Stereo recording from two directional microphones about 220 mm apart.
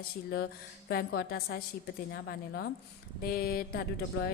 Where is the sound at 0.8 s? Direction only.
45° left (ahead or behind).